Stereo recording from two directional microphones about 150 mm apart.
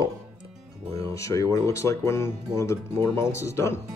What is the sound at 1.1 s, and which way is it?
Speech, 20° left (ahead or behind).